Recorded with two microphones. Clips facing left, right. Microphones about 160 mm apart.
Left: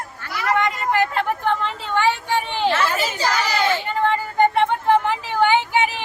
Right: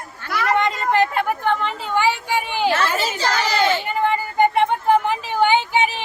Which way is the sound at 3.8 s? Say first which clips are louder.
Even; 10° right (ahead or behind).